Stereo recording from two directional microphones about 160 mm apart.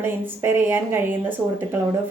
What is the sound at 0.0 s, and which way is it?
A woman's voice, 15° right (ahead or behind).